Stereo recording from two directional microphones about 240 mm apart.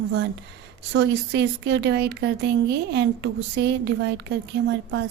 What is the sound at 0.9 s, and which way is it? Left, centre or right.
A woman's voice, right.